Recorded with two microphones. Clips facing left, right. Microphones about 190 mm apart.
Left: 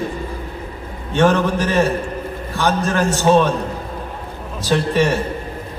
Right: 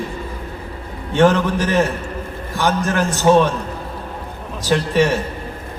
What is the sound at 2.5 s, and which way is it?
Speech, 15° right (ahead or behind).